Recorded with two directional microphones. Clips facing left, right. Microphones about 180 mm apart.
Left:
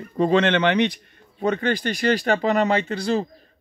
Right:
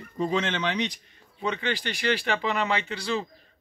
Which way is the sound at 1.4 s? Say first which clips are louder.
Left 7 dB; 45° left (ahead or behind).